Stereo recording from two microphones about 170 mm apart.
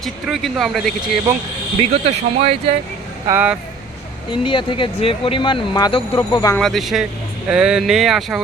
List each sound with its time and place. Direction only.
0.0 s speech: centre (ahead or behind)
1.8 s speech: 35° right (ahead or behind)
3.2 s speech: 10° right (ahead or behind)
4.3 s speech: 30° left (ahead or behind)
6.6 s speech: centre (ahead or behind)